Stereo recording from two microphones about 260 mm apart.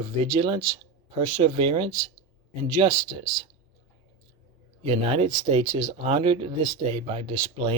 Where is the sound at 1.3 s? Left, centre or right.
Centre.